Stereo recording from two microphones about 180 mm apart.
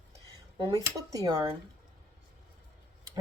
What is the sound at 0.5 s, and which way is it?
Speech, 20° right (ahead or behind).